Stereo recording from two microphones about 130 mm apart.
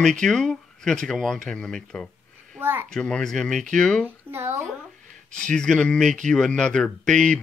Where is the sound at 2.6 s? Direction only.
15° right (ahead or behind).